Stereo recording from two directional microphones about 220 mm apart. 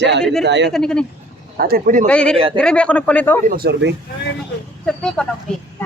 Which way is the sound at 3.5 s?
45° right (ahead or behind).